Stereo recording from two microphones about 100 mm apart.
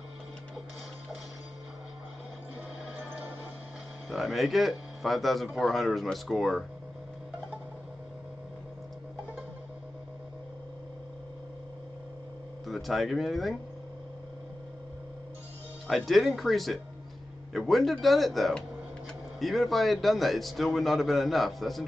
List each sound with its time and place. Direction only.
3.0 s music: 20° right (ahead or behind)
4.1 s a man's voice: centre (ahead or behind)
12.6 s speech: centre (ahead or behind)
15.9 s a man's voice: centre (ahead or behind)